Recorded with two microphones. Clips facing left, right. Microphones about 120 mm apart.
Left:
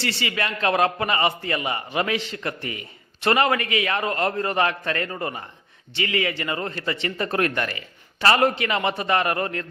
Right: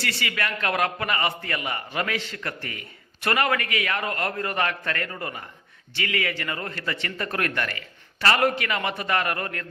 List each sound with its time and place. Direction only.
0.0 s a man's voice: 25° left (ahead or behind)